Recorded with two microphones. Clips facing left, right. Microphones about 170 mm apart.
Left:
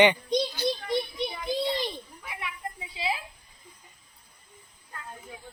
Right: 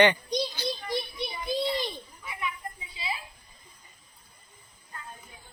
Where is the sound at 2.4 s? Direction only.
75° left (ahead or behind).